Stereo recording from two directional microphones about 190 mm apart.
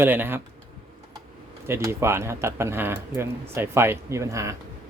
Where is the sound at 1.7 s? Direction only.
15° right (ahead or behind).